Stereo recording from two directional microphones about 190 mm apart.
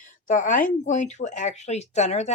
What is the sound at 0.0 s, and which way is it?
Speech, 45° left (ahead or behind).